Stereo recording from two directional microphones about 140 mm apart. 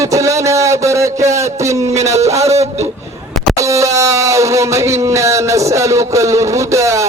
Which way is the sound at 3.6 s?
20° right (ahead or behind).